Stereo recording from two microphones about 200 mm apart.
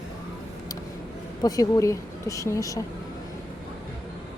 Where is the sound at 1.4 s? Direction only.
20° left (ahead or behind).